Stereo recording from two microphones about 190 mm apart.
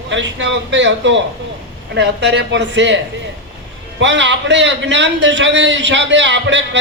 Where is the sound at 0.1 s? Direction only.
75° right (ahead or behind).